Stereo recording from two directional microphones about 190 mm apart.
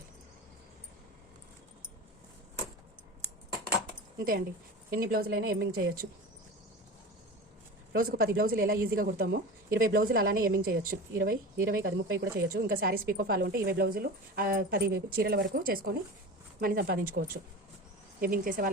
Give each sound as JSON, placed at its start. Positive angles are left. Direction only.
{"t": 4.2, "sound": "a woman's voice", "side_deg": -50}
{"t": 7.9, "sound": "a woman's voice", "side_deg": -50}